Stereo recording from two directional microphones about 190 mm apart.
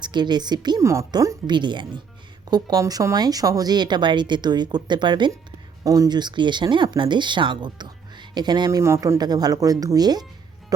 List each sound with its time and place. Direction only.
0.0 s speech: 25° right (ahead or behind)